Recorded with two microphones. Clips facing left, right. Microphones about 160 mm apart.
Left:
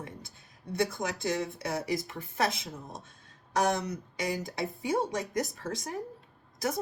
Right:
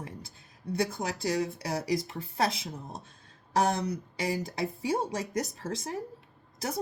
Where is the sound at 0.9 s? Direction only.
35° right (ahead or behind).